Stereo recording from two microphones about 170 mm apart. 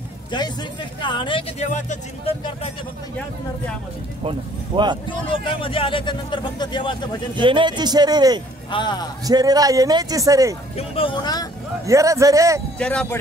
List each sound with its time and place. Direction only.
0.3 s speech: 25° left (ahead or behind)
1.6 s speech: 45° left (ahead or behind)
4.2 s a man's voice: 30° right (ahead or behind)
5.0 s speech: 30° left (ahead or behind)
7.3 s a man's voice: 30° right (ahead or behind)
8.6 s speech: 25° left (ahead or behind)
9.2 s a man's voice: 20° right (ahead or behind)
10.8 s speech: 30° left (ahead or behind)
11.8 s a man's voice: 20° right (ahead or behind)
12.7 s speech: 5° left (ahead or behind)